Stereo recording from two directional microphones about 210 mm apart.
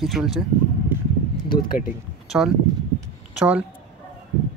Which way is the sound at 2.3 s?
5° right (ahead or behind).